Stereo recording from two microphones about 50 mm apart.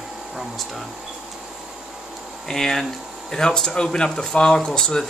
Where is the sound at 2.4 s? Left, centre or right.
Centre.